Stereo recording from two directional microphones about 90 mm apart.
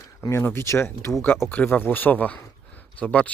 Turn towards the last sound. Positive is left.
turn(degrees=15)  # may be behind; listen again after turning